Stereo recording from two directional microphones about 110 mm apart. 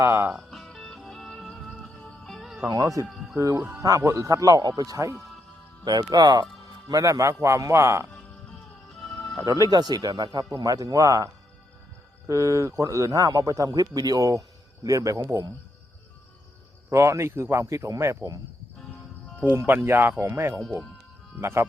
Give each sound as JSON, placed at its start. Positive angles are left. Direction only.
{"t": 0.0, "sound": "speech", "side_deg": -20}
{"t": 0.5, "sound": "music", "side_deg": 0}
{"t": 2.6, "sound": "a man's voice", "side_deg": -35}
{"t": 3.5, "sound": "speech", "side_deg": -15}
{"t": 3.8, "sound": "a man's voice", "side_deg": -30}
{"t": 8.9, "sound": "music", "side_deg": 5}
{"t": 9.5, "sound": "a man's voice", "side_deg": -35}
{"t": 12.3, "sound": "a man's voice", "side_deg": -30}
{"t": 16.9, "sound": "speech", "side_deg": -25}
{"t": 19.5, "sound": "speech", "side_deg": -20}